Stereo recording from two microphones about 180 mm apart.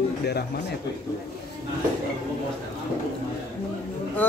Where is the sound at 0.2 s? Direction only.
65° left (ahead or behind).